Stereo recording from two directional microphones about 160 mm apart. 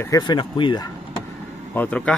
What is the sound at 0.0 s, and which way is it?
Speech, 25° left (ahead or behind).